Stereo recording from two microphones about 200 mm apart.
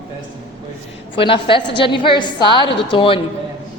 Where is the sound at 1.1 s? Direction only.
25° left (ahead or behind).